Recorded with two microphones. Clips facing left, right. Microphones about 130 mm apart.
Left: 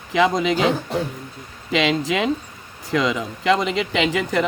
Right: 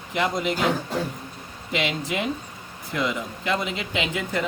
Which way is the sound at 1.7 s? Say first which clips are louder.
Left 6 dB; 90° left.